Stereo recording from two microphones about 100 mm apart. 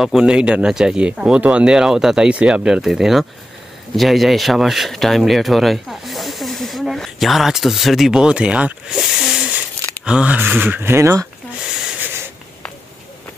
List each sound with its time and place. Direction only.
0.0 s speech: 5° right (ahead or behind); by 11.2 s 30° right (ahead or behind)